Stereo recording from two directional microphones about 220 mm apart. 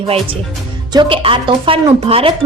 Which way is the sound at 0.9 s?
25° right (ahead or behind).